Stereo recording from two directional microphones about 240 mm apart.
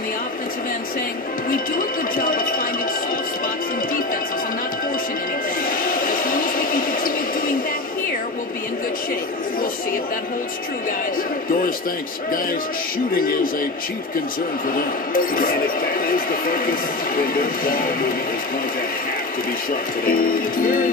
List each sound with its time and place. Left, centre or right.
2.1 s music: left
5.6 s a sound: left
13.1 s speech: left
15.1 s speech: left
20.1 s speech: left